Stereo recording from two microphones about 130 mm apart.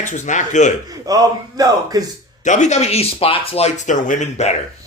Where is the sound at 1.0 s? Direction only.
30° right (ahead or behind).